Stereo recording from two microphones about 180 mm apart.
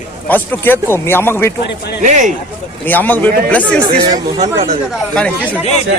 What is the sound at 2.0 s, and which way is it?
Speech, 45° right (ahead or behind).